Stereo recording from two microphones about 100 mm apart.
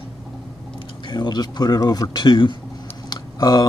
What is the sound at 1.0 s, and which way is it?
Speech, 45° left (ahead or behind).